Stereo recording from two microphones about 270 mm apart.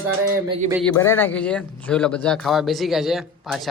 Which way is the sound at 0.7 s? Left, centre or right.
Centre.